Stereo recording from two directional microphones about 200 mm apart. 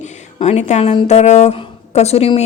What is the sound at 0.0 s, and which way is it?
A woman's voice, 35° left (ahead or behind).